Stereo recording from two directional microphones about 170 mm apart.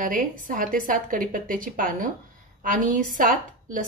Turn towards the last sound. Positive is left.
turn(degrees=-55)  # may be behind; listen again after turning